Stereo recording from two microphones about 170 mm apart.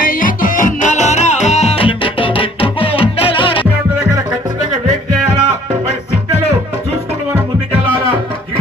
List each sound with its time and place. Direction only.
0.0 s music: 55° left (ahead or behind); by 3.7 s 30° left (ahead or behind)